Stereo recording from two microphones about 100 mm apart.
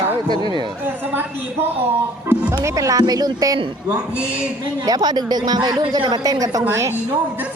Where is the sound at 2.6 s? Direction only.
35° right (ahead or behind).